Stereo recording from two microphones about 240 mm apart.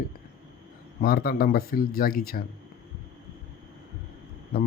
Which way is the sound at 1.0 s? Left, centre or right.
Left.